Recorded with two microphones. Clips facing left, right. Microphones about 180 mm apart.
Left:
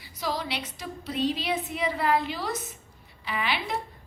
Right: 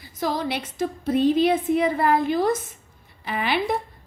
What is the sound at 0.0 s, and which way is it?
A woman's voice, 50° right (ahead or behind).